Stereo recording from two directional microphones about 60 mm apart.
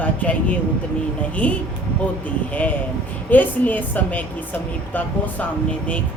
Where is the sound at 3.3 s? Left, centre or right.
Left.